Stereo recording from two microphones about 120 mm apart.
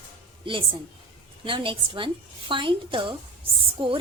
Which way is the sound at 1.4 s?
45° right (ahead or behind).